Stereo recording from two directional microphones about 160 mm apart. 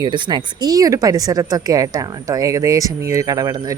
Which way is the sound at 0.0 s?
25° right (ahead or behind).